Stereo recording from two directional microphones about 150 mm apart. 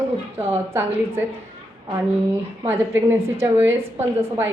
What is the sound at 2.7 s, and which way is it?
A woman's voice, 15° right (ahead or behind).